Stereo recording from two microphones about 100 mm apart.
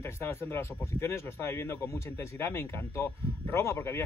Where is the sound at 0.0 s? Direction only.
25° left (ahead or behind).